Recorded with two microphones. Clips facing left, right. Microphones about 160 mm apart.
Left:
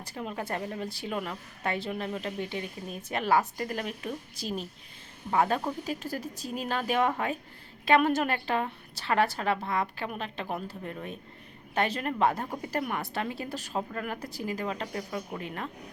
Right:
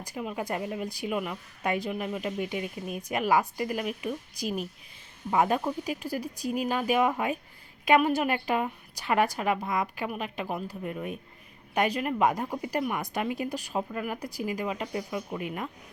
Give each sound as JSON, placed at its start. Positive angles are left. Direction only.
{"t": 0.0, "sound": "speech", "side_deg": -10}